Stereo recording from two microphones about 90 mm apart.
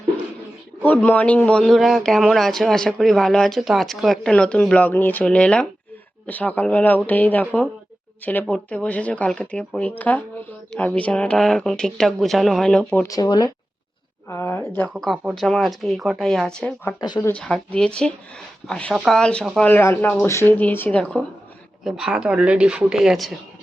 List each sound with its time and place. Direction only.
0.8 s speech: 20° left (ahead or behind)
13.1 s speech: 50° left (ahead or behind)
14.3 s speech: 25° left (ahead or behind)
15.4 s speech: 5° left (ahead or behind)
19.6 s speech: 25° left (ahead or behind)
20.2 s speech: 30° left (ahead or behind)
20.6 s speech: 20° left (ahead or behind)
21.0 s speech: 10° left (ahead or behind)
21.8 s a woman's voice: 5° right (ahead or behind)